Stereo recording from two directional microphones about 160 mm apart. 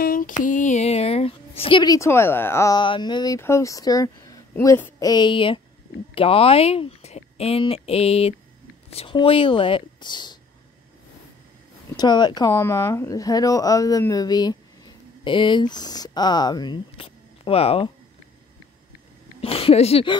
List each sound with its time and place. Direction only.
0.0 s a sound: 60° left (ahead or behind); by 2.0 s 30° left (ahead or behind)
2.0 s speech: 15° left (ahead or behind)
2.8 s speech: 30° left (ahead or behind)
11.9 s speech: 25° left (ahead or behind)
19.4 s speech: 35° left (ahead or behind)